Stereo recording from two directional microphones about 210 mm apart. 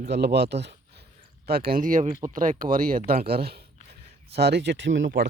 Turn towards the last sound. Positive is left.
turn(degrees=-55)  # may be behind; listen again after turning